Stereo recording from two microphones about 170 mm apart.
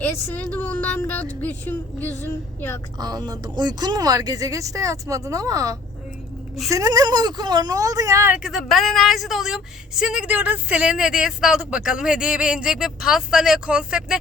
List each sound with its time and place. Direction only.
0.0 s a woman's voice: 10° left (ahead or behind)
3.0 s speech: 25° right (ahead or behind)
8.4 s a woman's voice: centre (ahead or behind)